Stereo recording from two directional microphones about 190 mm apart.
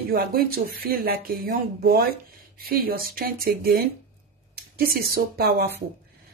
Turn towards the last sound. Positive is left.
turn(degrees=-55)  # may be behind; listen again after turning